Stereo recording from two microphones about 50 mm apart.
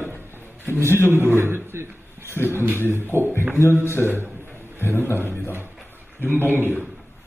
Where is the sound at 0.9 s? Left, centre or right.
Right.